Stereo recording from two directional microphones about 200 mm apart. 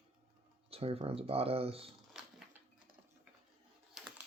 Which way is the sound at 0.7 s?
30° right (ahead or behind).